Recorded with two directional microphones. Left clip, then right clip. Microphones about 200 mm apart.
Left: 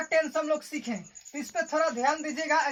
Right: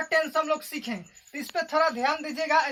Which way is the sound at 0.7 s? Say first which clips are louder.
Right 1 dB; 15° right (ahead or behind).